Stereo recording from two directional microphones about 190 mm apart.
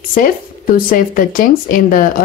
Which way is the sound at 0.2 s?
45° left (ahead or behind).